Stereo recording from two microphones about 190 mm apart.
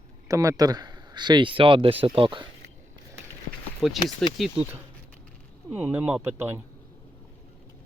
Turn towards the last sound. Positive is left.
turn(degrees=-10)  # may be behind; listen again after turning